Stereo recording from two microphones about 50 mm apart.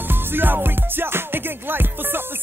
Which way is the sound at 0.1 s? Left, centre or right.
Right.